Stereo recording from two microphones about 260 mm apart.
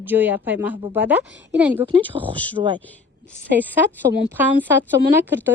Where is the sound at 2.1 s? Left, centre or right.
Centre.